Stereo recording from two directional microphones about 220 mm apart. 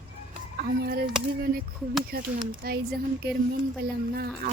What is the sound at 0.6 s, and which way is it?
Speech, 45° right (ahead or behind).